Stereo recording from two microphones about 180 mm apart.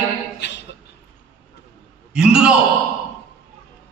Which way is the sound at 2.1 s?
5° right (ahead or behind).